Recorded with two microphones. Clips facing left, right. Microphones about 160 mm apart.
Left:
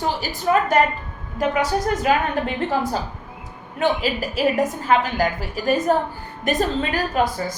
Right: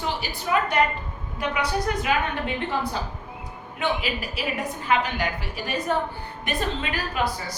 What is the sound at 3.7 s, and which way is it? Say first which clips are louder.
A woman's voice: left 6 dB; 40° left (ahead or behind).